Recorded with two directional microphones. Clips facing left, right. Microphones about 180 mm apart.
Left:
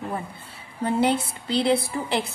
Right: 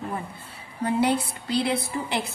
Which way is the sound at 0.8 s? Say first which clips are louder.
Left 1 dB; 25° left (ahead or behind).